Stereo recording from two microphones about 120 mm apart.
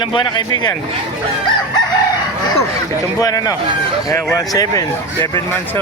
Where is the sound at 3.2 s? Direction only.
30° left (ahead or behind).